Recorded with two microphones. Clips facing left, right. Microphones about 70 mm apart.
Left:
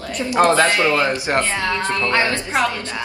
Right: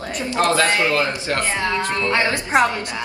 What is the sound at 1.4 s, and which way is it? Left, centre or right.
Speech, centre.